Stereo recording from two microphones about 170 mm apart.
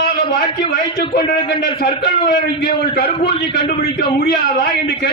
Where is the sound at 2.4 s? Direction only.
65° left (ahead or behind).